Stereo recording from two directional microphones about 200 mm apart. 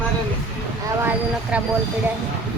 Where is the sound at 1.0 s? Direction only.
10° right (ahead or behind).